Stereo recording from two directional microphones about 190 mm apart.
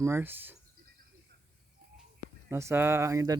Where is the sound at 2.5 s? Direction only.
15° right (ahead or behind).